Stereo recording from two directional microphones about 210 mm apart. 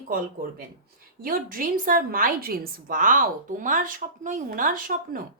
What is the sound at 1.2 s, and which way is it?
A woman's voice, 45° right (ahead or behind).